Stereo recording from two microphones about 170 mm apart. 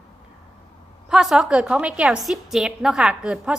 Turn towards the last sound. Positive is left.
turn(degrees=-5)  # may be behind; listen again after turning